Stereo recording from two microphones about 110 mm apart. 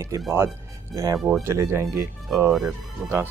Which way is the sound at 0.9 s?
35° right (ahead or behind).